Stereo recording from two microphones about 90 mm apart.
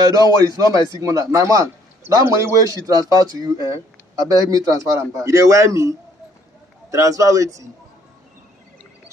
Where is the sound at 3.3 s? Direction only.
40° right (ahead or behind).